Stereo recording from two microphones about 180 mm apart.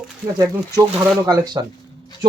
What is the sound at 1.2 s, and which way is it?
Speech, 20° right (ahead or behind).